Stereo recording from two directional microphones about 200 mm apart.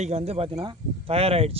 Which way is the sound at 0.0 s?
30° right (ahead or behind).